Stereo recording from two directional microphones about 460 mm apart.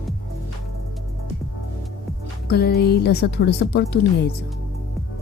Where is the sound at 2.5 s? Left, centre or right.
Left.